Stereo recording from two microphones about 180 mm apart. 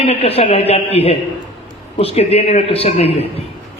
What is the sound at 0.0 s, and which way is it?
A man's voice, 35° left (ahead or behind).